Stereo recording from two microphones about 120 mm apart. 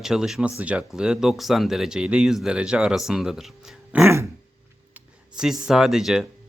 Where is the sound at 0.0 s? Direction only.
5° right (ahead or behind).